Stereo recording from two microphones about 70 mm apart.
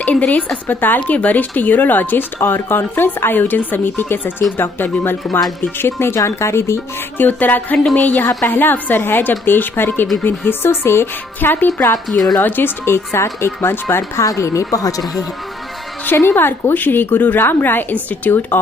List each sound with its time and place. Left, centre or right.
0.0 s speech: centre; by 6.8 s left
7.2 s speech: left
8.5 s speech: left
12.1 s a woman's voice: centre
12.4 s speech: left
16.1 s speech: left